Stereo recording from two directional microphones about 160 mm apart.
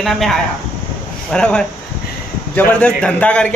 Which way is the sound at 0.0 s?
Centre (ahead or behind).